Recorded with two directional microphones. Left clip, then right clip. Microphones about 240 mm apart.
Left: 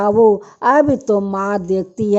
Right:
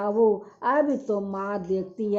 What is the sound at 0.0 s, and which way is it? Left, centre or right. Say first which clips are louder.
Speech: left 10 dB; left.